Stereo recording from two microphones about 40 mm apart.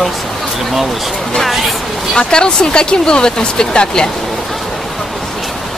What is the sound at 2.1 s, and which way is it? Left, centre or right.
Speech, centre.